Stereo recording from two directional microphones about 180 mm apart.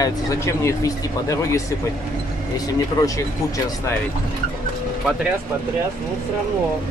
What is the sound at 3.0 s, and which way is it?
Speech, 20° left (ahead or behind).